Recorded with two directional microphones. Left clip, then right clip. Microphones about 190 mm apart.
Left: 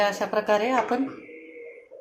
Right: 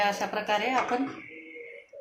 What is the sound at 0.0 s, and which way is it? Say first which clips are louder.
Speech: left 4 dB; 50° left (ahead or behind).